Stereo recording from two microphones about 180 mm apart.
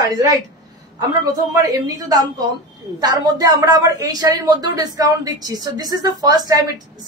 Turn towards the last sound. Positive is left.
turn(degrees=-20)  # may be behind; listen again after turning